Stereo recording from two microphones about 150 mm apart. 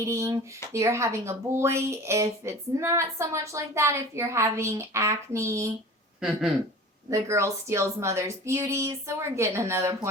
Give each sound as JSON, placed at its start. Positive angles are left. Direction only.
{"t": 0.0, "sound": "speech", "side_deg": -20}
{"t": 6.1, "sound": "speech", "side_deg": -5}
{"t": 7.1, "sound": "speech", "side_deg": -20}